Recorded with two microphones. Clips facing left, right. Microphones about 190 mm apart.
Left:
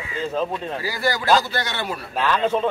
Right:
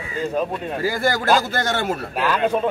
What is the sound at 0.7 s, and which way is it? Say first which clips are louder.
Speech: right 5 dB; 50° right (ahead or behind).